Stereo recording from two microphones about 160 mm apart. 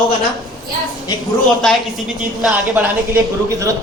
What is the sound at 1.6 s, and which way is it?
Speech, 5° left (ahead or behind).